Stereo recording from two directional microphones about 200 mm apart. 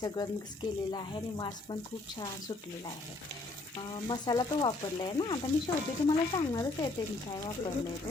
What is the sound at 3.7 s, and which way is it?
Speech, 20° left (ahead or behind).